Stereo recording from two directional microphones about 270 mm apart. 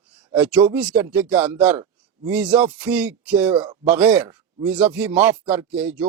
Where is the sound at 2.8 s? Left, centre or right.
Centre.